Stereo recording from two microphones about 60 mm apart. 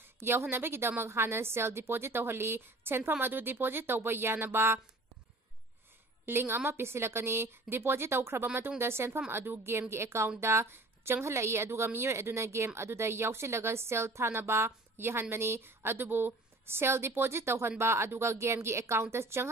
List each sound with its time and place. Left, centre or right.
0.2 s a woman's voice: right
6.2 s speech: right